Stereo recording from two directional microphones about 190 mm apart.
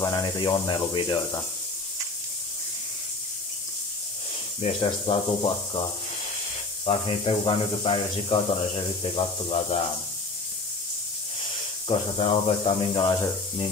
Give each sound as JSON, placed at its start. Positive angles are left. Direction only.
{"t": 0.0, "sound": "speech", "side_deg": 20}
{"t": 4.6, "sound": "speech", "side_deg": 30}
{"t": 6.9, "sound": "speech", "side_deg": 30}
{"t": 11.9, "sound": "speech", "side_deg": 30}